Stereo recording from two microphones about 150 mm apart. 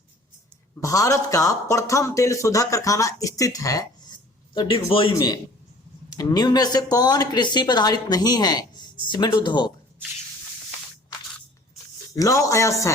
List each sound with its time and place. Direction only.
0.8 s a man's voice: 20° left (ahead or behind)
12.1 s a man's voice: 20° left (ahead or behind)